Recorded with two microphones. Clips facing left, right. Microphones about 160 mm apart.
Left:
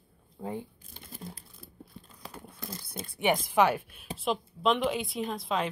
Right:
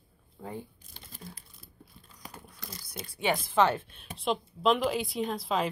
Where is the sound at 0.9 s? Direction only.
50° left (ahead or behind).